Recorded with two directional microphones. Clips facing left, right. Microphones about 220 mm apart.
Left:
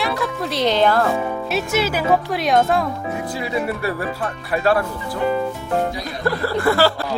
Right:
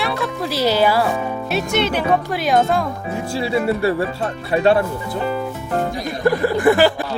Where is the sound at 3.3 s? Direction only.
30° right (ahead or behind).